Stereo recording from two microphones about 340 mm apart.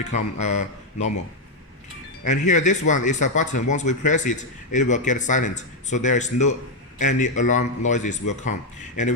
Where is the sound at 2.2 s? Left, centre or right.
Left.